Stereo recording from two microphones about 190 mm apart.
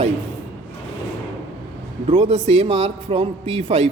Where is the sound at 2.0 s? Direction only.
25° right (ahead or behind).